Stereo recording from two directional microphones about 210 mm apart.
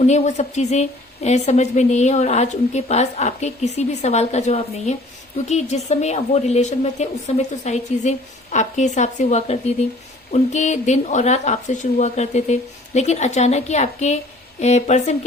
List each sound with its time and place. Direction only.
0.0 s a woman's voice: 35° left (ahead or behind)